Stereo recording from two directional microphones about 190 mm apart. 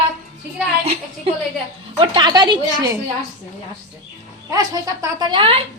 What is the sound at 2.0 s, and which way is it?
Speech, 25° right (ahead or behind).